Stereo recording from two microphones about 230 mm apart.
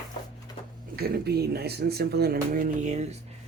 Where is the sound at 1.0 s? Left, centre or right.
Right.